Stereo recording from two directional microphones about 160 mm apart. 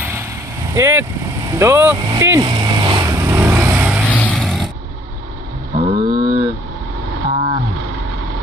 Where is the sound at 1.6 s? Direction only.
15° right (ahead or behind).